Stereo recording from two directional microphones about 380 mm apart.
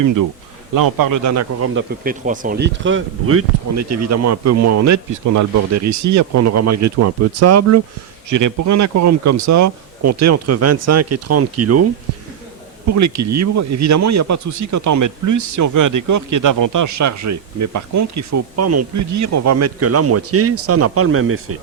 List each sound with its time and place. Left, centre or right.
0.0 s speech: right
2.0 s speech: right
12.9 s speech: right